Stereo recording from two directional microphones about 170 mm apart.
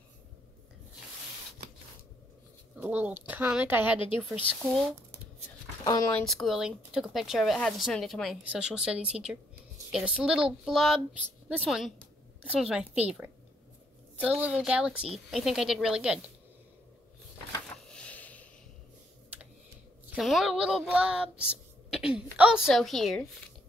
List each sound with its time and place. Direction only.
2.8 s bird: 10° right (ahead or behind)
4.6 s speech: centre (ahead or behind)
5.9 s speech: 20° left (ahead or behind)
6.1 s a woman's voice: centre (ahead or behind)
14.2 s speech: 10° right (ahead or behind)
17.8 s a sound: 5° left (ahead or behind)
20.2 s speech: centre (ahead or behind)